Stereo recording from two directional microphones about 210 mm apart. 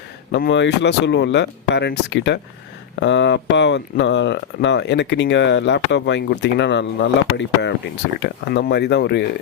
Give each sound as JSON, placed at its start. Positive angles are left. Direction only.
{"t": 0.3, "sound": "speech", "side_deg": 60}